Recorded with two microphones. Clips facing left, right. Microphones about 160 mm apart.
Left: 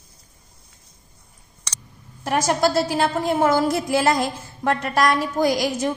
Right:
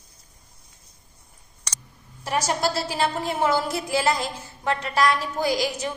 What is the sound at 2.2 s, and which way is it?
A woman's voice, 50° left (ahead or behind).